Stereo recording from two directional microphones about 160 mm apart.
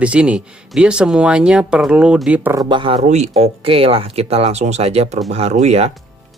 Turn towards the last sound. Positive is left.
turn(degrees=-45)  # may be behind; listen again after turning